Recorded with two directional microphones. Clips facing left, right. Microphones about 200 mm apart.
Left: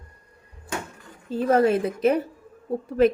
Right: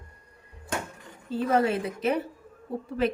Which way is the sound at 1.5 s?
45° left (ahead or behind).